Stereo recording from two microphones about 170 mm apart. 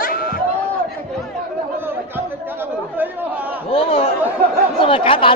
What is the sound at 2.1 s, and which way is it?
Chatter, 10° right (ahead or behind).